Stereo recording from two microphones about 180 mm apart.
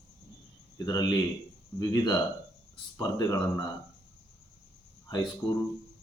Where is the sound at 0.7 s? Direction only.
20° left (ahead or behind).